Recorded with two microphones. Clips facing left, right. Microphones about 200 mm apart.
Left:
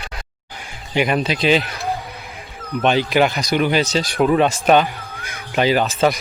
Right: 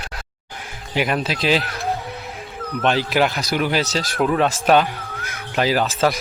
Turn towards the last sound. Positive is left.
turn(degrees=0)  # may be behind; listen again after turning